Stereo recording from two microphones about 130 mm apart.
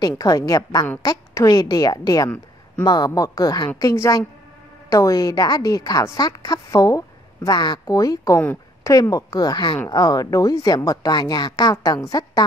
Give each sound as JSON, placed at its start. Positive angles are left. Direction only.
{"t": 0.0, "sound": "a woman's voice", "side_deg": 30}
{"t": 3.9, "sound": "a woman's voice", "side_deg": 20}
{"t": 8.4, "sound": "a woman's voice", "side_deg": 15}
{"t": 8.9, "sound": "a woman's voice", "side_deg": 30}